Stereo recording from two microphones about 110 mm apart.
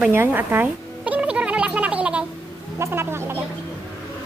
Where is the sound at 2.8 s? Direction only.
20° right (ahead or behind).